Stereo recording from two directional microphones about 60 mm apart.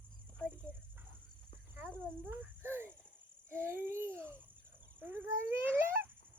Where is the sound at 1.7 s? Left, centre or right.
Right.